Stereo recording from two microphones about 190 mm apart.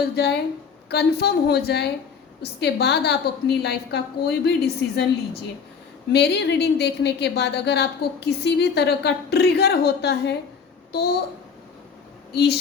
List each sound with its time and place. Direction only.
0.0 s a woman's voice: 60° left (ahead or behind)
12.3 s a woman's voice: 60° left (ahead or behind)